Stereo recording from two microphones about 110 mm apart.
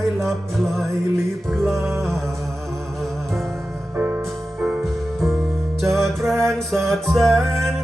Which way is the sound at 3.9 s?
15° right (ahead or behind).